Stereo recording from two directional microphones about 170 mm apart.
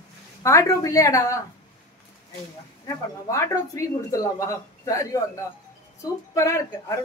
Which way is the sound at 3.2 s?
20° left (ahead or behind).